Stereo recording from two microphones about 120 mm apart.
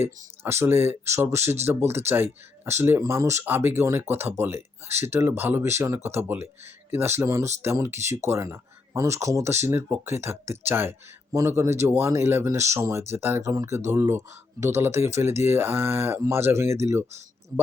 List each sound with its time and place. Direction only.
0.0 s speech: 20° right (ahead or behind)